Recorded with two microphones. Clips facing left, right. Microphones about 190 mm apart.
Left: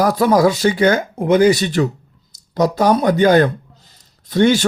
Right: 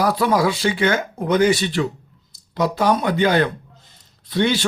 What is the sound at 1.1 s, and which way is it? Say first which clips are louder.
Speech: left 3 dB; 25° left (ahead or behind).